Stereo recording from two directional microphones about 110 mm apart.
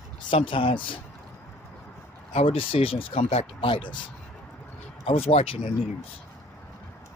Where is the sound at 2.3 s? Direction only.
55° left (ahead or behind).